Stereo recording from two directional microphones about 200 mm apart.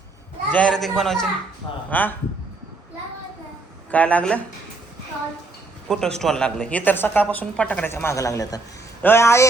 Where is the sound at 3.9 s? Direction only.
5° left (ahead or behind).